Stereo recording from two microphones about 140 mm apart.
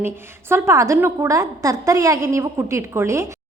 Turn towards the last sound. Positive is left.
turn(degrees=-20)  # may be behind; listen again after turning